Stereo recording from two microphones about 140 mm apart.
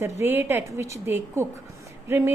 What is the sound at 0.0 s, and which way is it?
A woman's voice, 15° right (ahead or behind).